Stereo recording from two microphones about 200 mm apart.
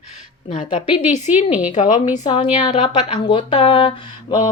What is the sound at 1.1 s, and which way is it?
Speech, 35° left (ahead or behind).